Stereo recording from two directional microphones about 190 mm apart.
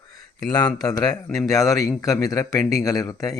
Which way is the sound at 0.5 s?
20° left (ahead or behind).